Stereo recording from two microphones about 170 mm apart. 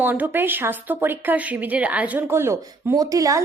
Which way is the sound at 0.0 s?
10° right (ahead or behind).